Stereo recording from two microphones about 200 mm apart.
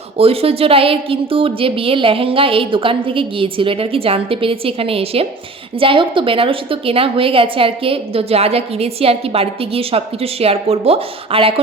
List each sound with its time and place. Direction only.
0.2 s a woman's voice: 30° right (ahead or behind)